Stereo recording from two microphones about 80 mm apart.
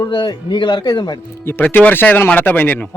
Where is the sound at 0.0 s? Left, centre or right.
Left.